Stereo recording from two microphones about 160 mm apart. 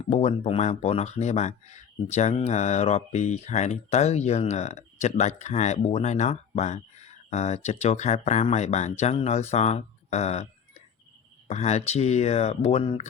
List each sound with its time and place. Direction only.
0.1 s speech: 40° left (ahead or behind)